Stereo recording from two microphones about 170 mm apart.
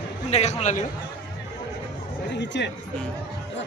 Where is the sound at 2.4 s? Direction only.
90° left.